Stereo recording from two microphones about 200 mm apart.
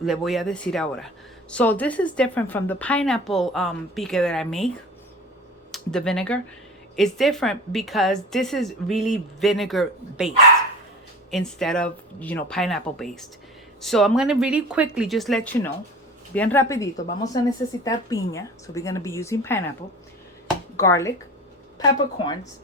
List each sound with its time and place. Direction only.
0.0 s speech: centre (ahead or behind)
5.7 s a woman's voice: 5° left (ahead or behind)
20.7 s a woman's voice: 15° left (ahead or behind)